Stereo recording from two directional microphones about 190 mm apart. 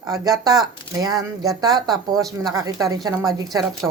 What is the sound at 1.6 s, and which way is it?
A woman's voice, 20° right (ahead or behind).